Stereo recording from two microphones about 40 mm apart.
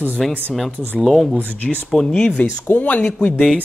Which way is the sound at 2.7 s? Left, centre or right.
Left.